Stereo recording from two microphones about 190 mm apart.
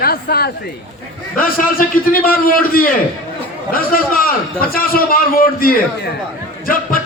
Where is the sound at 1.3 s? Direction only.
50° left (ahead or behind).